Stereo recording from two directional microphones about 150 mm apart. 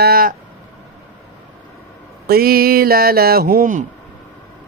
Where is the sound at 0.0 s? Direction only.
90° right.